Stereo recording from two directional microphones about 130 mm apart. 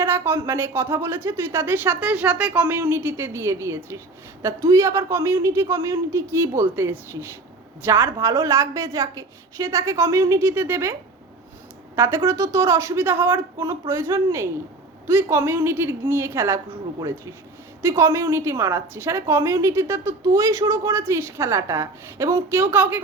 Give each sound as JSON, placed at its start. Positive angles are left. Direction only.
{"t": 0.0, "sound": "a sound", "side_deg": -20}
{"t": 0.4, "sound": "a woman's voice", "side_deg": -20}
{"t": 11.9, "sound": "a woman's voice", "side_deg": -20}